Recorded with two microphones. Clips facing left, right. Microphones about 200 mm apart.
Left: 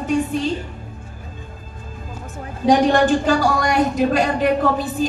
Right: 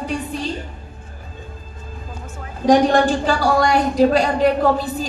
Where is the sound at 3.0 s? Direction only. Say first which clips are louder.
Left 2 dB; 45° left (ahead or behind).